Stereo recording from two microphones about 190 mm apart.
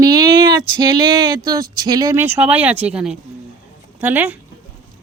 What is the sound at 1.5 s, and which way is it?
Speech, 20° right (ahead or behind).